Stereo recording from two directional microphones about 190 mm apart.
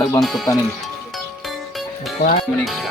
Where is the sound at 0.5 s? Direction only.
15° left (ahead or behind).